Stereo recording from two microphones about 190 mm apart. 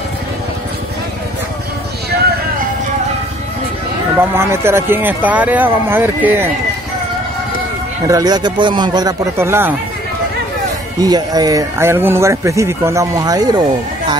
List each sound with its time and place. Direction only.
4.2 s speech: 10° right (ahead or behind)
8.1 s speech: 20° right (ahead or behind)
11.0 s speech: 20° right (ahead or behind)